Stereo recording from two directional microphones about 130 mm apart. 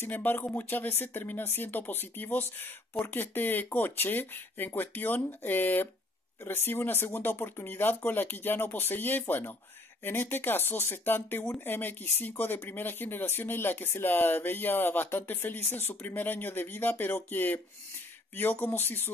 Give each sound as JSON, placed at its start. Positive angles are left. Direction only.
{"t": 0.0, "sound": "speech", "side_deg": 15}